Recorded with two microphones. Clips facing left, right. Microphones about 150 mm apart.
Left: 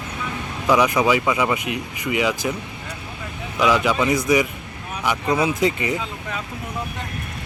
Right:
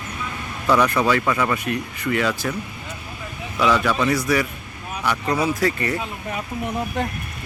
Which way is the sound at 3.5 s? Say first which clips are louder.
Left 1 dB; 15° left (ahead or behind).